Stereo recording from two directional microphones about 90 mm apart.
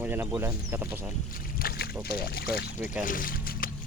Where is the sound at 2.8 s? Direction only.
15° right (ahead or behind).